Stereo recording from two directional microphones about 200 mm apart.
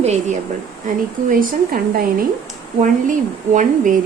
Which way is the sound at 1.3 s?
45° right (ahead or behind).